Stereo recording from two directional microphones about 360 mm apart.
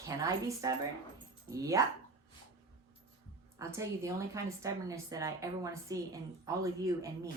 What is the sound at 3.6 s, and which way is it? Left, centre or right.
A woman's voice, centre.